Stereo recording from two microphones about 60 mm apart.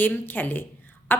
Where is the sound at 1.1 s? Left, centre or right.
Left.